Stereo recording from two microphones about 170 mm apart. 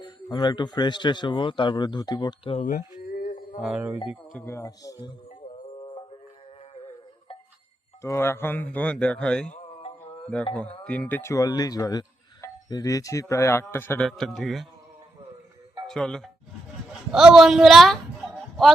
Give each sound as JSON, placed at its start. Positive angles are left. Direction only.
{"t": 0.0, "sound": "a man's voice", "side_deg": 25}
{"t": 3.1, "sound": "music", "side_deg": 60}
{"t": 3.6, "sound": "speech", "side_deg": -5}
{"t": 4.1, "sound": "a man's voice", "side_deg": 0}
{"t": 4.4, "sound": "a man's voice", "side_deg": 20}
{"t": 5.8, "sound": "music", "side_deg": 25}
{"t": 8.0, "sound": "a man's voice", "side_deg": 15}
{"t": 10.8, "sound": "speech", "side_deg": 5}
{"t": 14.0, "sound": "a man's voice", "side_deg": 0}
{"t": 15.9, "sound": "a man's voice", "side_deg": 5}